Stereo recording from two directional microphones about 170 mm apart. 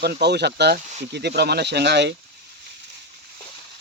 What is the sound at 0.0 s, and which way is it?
Speech, 75° right (ahead or behind).